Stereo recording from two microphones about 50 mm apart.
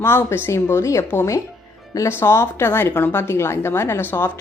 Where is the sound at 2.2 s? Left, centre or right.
Left.